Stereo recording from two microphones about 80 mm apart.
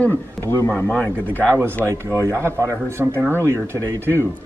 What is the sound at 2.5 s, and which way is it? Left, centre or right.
Speech, right.